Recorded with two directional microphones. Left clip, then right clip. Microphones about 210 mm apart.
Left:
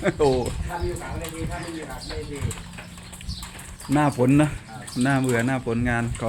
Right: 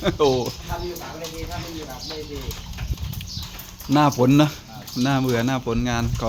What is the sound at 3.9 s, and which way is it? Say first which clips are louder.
Speech: right 3 dB; 20° right (ahead or behind).